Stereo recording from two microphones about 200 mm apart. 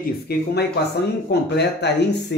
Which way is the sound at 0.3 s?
50° left (ahead or behind).